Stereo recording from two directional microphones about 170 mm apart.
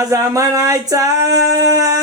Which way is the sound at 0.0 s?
20° right (ahead or behind).